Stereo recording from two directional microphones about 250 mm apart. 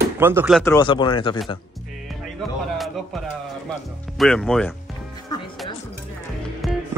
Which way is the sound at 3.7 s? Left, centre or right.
Centre.